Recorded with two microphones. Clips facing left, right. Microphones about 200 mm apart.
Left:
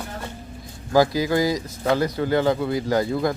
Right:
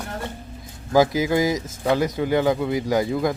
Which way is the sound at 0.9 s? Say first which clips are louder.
Right 1 dB; 20° right (ahead or behind).